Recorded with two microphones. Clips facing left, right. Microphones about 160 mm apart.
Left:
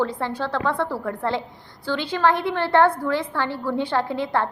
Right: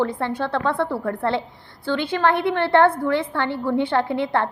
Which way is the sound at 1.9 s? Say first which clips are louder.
Right 1 dB; 55° right (ahead or behind).